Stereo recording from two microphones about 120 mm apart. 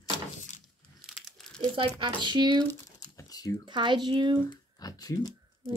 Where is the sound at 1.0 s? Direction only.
Centre (ahead or behind).